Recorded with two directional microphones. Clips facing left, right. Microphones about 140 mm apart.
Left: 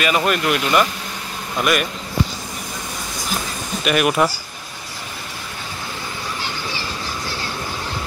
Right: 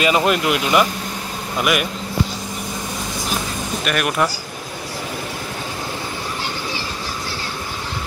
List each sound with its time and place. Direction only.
0.0 s speech: 20° right (ahead or behind)
3.8 s speech: 5° left (ahead or behind)